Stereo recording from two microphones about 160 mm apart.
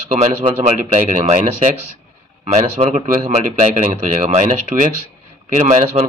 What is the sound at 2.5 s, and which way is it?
A man's voice, 45° right (ahead or behind).